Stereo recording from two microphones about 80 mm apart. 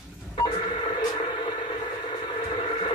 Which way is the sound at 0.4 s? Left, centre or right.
Left.